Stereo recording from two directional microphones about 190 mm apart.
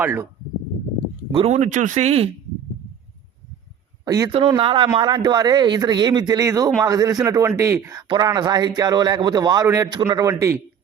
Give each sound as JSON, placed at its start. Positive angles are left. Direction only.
{"t": 0.0, "sound": "speech", "side_deg": -10}
{"t": 1.3, "sound": "speech", "side_deg": -30}
{"t": 4.0, "sound": "speech", "side_deg": -20}